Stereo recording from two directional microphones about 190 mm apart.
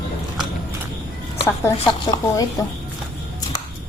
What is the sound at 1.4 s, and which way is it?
Speech, 15° left (ahead or behind).